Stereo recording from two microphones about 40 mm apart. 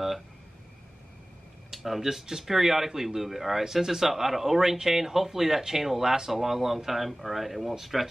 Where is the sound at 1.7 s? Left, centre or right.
Centre.